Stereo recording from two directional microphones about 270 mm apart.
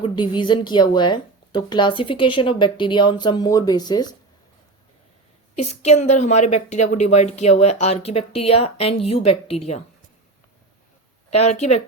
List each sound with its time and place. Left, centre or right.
0.0 s a woman's voice: centre
5.5 s a woman's voice: left
11.3 s a woman's voice: left